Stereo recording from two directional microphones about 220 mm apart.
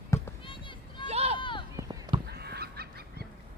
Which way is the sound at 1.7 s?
15° right (ahead or behind).